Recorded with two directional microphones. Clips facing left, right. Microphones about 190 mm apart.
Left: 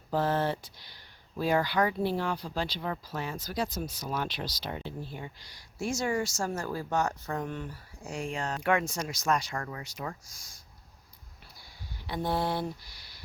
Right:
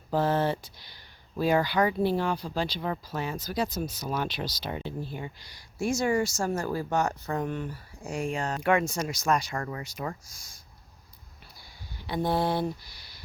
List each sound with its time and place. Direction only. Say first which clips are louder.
0.1 s speech: right 3 dB; 10° right (ahead or behind)
8.0 s speech: right 4 dB; 50° right (ahead or behind)
8.4 s speech: right 2 dB; 10° right (ahead or behind)
10.0 s mantra: right 3 dB; 25° right (ahead or behind)
12.3 s mantra: right 3 dB; 20° right (ahead or behind)